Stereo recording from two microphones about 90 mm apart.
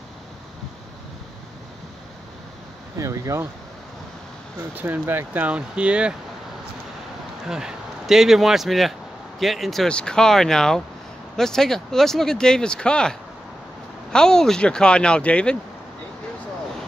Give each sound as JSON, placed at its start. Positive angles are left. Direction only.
{"t": 3.0, "sound": "speech", "side_deg": -35}
{"t": 4.7, "sound": "speech", "side_deg": -20}
{"t": 7.4, "sound": "speech", "side_deg": -5}